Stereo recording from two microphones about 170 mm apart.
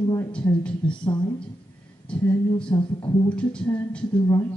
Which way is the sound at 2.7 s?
30° left (ahead or behind).